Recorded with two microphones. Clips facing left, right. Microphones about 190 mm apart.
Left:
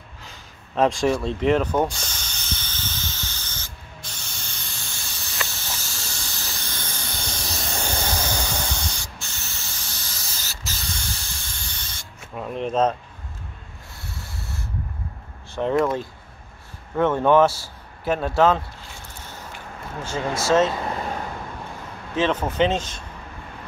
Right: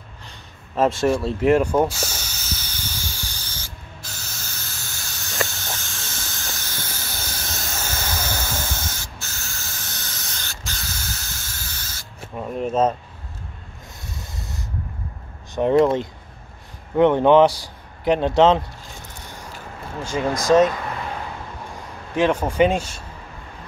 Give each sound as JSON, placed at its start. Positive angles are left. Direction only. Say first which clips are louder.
{"t": 0.3, "sound": "a sound", "louder": "right 1 dB", "side_deg": -5}
{"t": 1.2, "sound": "snake", "louder": "right 3 dB", "side_deg": -5}
{"t": 4.3, "sound": "hiss", "louder": "right 1 dB", "side_deg": -5}
{"t": 12.4, "sound": "a sound", "louder": "right 1 dB", "side_deg": -5}
{"t": 14.1, "sound": "sanding", "louder": "right 1 dB", "side_deg": -20}
{"t": 15.8, "sound": "a man's voice", "louder": "right 5 dB", "side_deg": -20}
{"t": 20.0, "sound": "a man's voice", "louder": "right 3 dB", "side_deg": -15}
{"t": 22.1, "sound": "a man's voice", "louder": "right 3 dB", "side_deg": -10}